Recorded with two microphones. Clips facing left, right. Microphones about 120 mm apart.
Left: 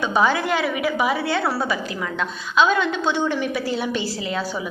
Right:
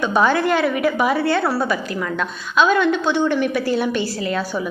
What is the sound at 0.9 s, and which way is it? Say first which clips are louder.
Speech: right 2 dB; 10° left (ahead or behind).